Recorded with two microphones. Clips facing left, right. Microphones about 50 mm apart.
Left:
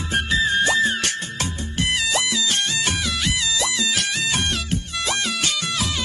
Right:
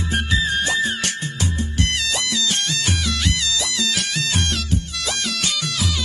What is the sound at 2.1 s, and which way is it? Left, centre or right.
Music, left.